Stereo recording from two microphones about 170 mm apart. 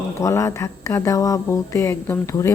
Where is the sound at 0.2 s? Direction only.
15° left (ahead or behind).